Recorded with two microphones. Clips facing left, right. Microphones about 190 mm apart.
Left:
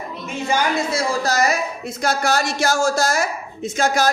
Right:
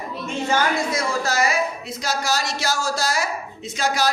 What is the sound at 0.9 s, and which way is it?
A man's voice, 35° left (ahead or behind).